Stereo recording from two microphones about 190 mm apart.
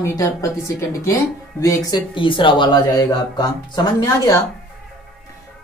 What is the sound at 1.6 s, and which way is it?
Speech, 25° left (ahead or behind).